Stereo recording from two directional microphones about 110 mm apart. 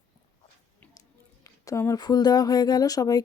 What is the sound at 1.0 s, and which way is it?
Speech, 30° left (ahead or behind).